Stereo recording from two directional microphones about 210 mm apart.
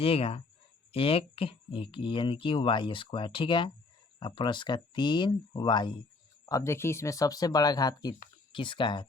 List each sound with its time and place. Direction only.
0.0 s speech: 25° left (ahead or behind)